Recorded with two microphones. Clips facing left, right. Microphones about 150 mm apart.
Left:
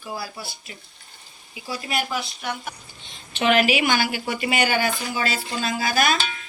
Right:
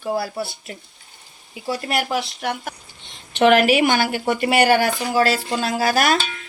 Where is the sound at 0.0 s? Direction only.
65° right (ahead or behind); by 2.7 s 85° right.